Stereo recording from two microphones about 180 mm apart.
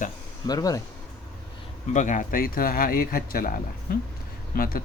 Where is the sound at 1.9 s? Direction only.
45° left (ahead or behind).